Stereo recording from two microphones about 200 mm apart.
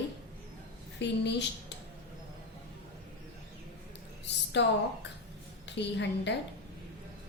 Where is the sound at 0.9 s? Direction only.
60° left (ahead or behind).